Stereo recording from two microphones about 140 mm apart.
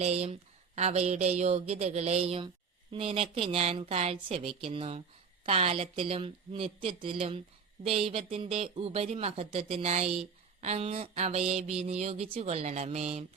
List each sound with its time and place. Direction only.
0.0 s speech: 50° right (ahead or behind)